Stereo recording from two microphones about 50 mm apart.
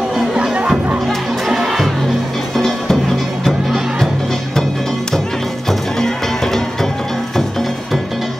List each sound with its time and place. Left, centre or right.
0.4 s music: centre
1.0 s crowd: centre
2.5 s music: centre
5.7 s music: centre